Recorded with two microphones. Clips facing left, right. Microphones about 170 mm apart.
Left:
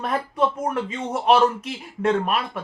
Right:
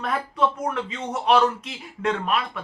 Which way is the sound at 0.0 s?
40° left (ahead or behind).